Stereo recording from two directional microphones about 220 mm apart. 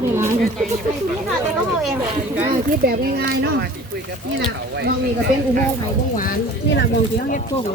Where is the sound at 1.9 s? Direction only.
10° right (ahead or behind).